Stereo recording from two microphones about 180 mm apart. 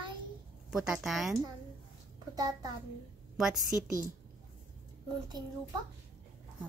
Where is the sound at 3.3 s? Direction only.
Centre (ahead or behind).